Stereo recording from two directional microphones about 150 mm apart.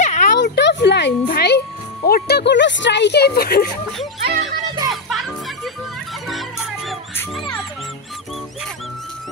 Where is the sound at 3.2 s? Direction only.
90° left.